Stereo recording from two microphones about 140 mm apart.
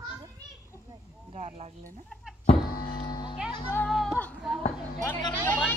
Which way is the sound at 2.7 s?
90° left.